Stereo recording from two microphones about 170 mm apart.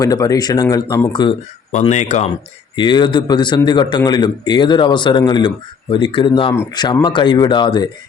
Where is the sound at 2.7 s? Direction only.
25° left (ahead or behind).